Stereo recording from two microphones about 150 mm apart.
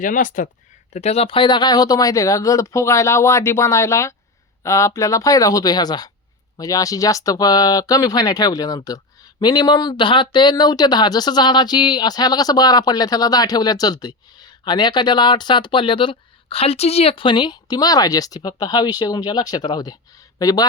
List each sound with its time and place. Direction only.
0.0 s speech: 60° left (ahead or behind)
0.9 s speech: 45° left (ahead or behind); by 20.7 s 25° left (ahead or behind)